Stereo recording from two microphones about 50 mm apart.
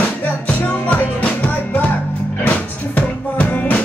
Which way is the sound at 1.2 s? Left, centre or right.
Left.